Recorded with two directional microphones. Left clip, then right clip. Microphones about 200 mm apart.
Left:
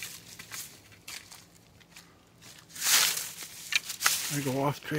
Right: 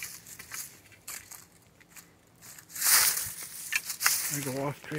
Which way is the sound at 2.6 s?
10° left (ahead or behind).